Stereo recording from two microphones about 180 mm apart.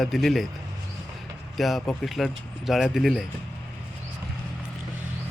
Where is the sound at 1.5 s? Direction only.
Centre (ahead or behind).